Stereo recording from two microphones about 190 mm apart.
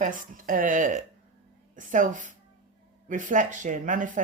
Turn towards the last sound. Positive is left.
turn(degrees=-45)  # may be behind; listen again after turning